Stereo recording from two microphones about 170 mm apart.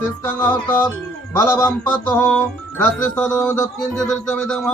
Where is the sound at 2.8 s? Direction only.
10° left (ahead or behind).